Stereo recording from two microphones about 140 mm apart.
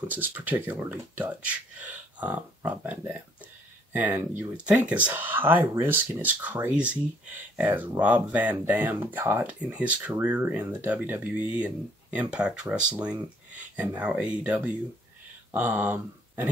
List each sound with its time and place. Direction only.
0.1 s speech: 10° right (ahead or behind)